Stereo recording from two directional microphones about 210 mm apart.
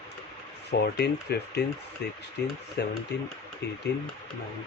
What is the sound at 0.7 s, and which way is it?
Speech, 50° left (ahead or behind).